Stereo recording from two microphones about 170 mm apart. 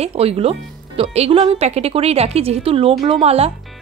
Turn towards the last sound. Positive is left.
turn(degrees=-35)  # may be behind; listen again after turning